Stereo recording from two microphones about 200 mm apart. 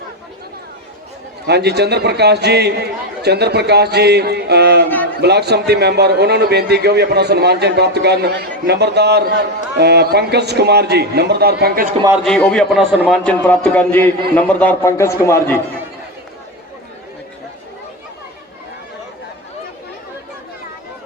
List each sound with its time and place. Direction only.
1.5 s a man's voice: 55° right (ahead or behind)
12.2 s a man's voice: 5° left (ahead or behind)